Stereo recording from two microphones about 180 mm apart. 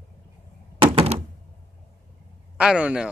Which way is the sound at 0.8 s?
35° right (ahead or behind).